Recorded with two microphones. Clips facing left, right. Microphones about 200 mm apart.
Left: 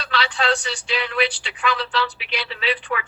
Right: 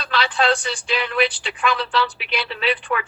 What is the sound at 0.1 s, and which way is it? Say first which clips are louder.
Speech: right 3 dB; 50° right (ahead or behind).